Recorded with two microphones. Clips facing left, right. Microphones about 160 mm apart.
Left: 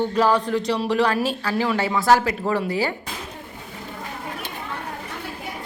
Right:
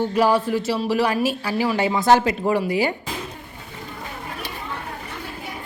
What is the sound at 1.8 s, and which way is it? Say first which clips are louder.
A woman's voice: right 2 dB; 20° right (ahead or behind).